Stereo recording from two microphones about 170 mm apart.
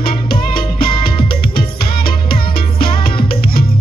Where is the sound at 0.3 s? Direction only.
60° left (ahead or behind).